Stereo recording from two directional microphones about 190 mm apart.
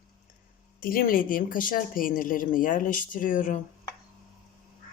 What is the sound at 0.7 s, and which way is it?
Speech, 45° left (ahead or behind).